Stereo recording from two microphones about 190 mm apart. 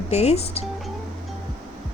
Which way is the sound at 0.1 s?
35° left (ahead or behind).